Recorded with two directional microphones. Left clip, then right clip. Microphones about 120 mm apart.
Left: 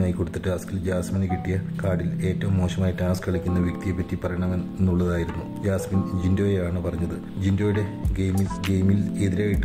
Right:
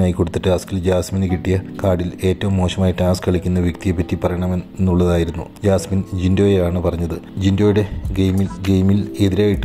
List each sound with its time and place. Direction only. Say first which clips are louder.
0.0 s speech: right 9 dB; 45° right (ahead or behind)